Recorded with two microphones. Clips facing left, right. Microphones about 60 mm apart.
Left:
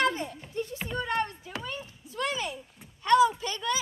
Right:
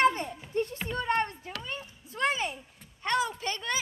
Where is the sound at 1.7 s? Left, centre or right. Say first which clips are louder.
Even; right.